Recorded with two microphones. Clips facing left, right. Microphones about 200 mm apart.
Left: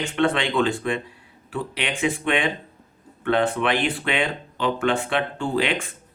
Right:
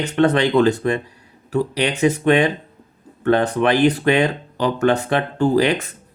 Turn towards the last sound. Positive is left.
turn(degrees=-40)  # may be behind; listen again after turning